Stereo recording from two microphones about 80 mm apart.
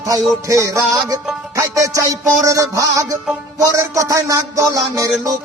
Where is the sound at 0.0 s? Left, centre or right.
Right.